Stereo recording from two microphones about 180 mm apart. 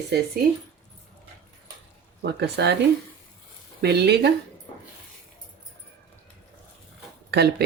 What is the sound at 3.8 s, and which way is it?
Speech, 65° right (ahead or behind).